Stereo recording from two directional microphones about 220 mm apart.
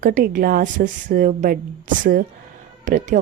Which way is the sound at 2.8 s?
35° right (ahead or behind).